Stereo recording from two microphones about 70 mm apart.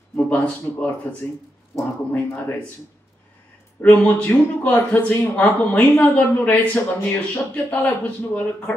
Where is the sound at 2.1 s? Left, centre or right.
Left.